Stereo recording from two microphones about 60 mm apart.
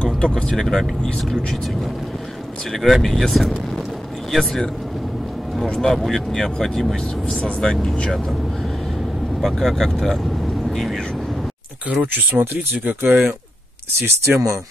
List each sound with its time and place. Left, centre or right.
0.0 s speech: centre
2.7 s speech: centre
5.8 s speech: centre
9.4 s speech: centre
12.0 s speech: right
14.0 s speech: right